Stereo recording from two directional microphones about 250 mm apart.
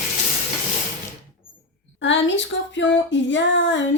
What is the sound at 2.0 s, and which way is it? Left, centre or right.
Speech, left.